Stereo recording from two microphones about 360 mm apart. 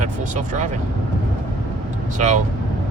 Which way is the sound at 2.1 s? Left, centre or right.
Centre.